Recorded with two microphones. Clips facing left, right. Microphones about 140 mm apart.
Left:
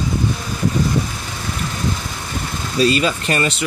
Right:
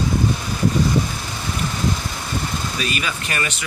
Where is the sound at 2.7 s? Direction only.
30° left (ahead or behind).